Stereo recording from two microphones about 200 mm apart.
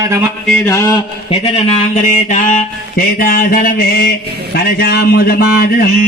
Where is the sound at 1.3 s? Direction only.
30° left (ahead or behind).